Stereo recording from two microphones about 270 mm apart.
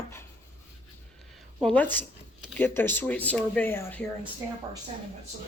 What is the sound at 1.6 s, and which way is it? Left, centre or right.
Speech, centre.